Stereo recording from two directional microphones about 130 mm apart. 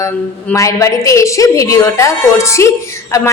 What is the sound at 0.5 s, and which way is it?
A woman's voice, 25° left (ahead or behind).